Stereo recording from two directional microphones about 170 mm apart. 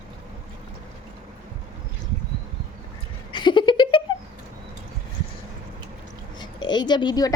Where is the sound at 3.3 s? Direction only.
25° left (ahead or behind).